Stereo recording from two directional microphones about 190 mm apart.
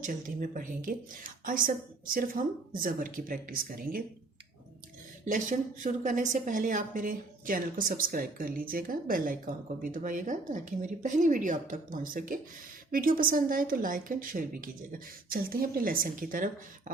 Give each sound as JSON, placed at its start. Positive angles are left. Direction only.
{"t": 0.0, "sound": "a woman's voice", "side_deg": -45}
{"t": 5.2, "sound": "a woman's voice", "side_deg": -40}